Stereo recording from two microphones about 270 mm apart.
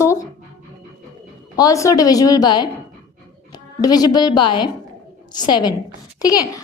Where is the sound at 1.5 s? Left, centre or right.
Centre.